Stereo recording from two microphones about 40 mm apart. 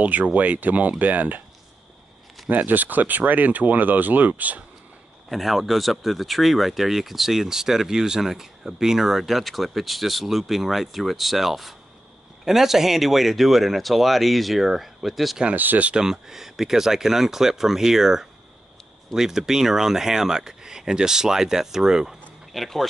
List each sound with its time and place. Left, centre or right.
0.0 s speech: right
2.5 s speech: right
5.3 s speech: centre
15.5 s speech: right
15.9 s speech: centre
22.5 s speech: centre